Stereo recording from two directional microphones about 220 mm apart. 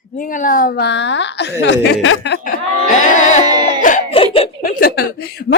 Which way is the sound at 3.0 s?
35° left (ahead or behind).